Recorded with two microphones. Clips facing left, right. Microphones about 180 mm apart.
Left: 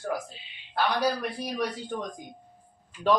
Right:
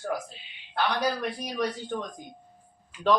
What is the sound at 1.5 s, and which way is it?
Speech, 10° left (ahead or behind).